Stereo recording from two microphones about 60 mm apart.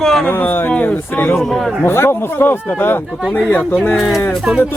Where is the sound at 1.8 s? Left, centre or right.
Left.